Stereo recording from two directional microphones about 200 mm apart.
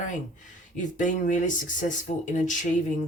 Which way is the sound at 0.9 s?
40° left (ahead or behind).